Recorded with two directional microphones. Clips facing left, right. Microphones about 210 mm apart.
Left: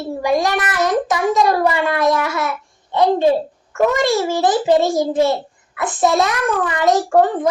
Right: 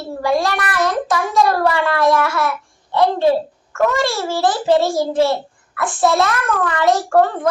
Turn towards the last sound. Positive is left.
turn(degrees=20)  # may be behind; listen again after turning